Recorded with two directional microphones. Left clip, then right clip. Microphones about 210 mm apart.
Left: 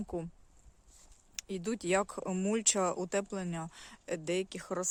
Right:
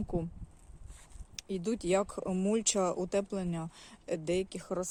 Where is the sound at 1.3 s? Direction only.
15° left (ahead or behind).